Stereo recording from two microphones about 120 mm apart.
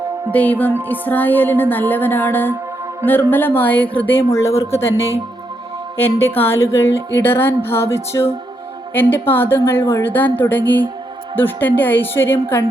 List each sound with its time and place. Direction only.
0.3 s music: 15° left (ahead or behind)
6.0 s music: 20° left (ahead or behind)